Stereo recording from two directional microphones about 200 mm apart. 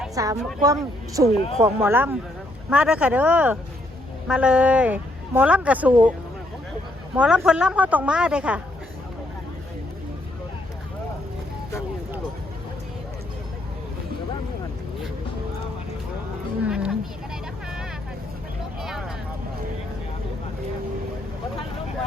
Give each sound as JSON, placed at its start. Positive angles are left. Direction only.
{"t": 0.1, "sound": "a woman's voice", "side_deg": -15}
{"t": 7.2, "sound": "speech", "side_deg": -5}
{"t": 16.6, "sound": "a sound", "side_deg": -5}
{"t": 18.8, "sound": "vehicle", "side_deg": 0}